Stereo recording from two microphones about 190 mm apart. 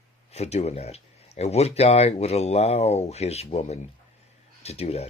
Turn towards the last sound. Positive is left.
turn(degrees=35)  # may be behind; listen again after turning